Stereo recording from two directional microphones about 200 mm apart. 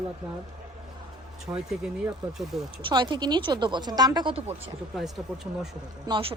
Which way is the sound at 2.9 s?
25° right (ahead or behind).